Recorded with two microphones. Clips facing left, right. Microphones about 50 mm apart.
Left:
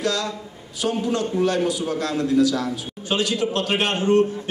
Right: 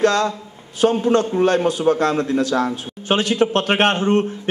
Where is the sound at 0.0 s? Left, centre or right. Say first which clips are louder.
Right 7 dB; right.